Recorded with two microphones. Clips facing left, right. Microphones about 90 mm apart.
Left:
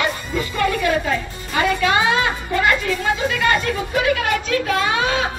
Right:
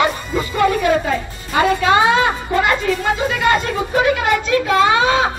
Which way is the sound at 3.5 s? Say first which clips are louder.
Right 5 dB; 25° right (ahead or behind).